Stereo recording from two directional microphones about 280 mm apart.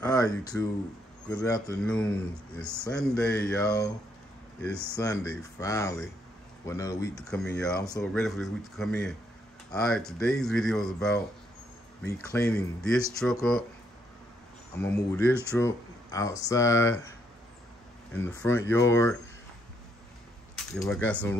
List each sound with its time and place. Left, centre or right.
0.0 s speech: centre
14.8 s speech: centre
18.1 s speech: centre
20.5 s speech: centre